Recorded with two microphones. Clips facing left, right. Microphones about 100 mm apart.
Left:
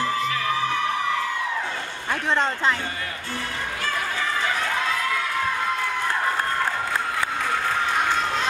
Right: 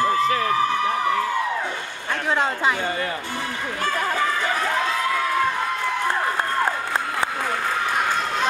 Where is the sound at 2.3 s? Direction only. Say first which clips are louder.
Right 1 dB; 10° right (ahead or behind).